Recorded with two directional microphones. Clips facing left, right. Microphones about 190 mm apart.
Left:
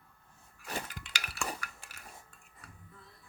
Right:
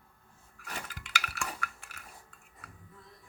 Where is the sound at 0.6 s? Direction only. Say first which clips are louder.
Left 3 dB; 30° left (ahead or behind).